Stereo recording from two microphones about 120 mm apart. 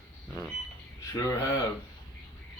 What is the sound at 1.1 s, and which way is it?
Speech, 25° left (ahead or behind).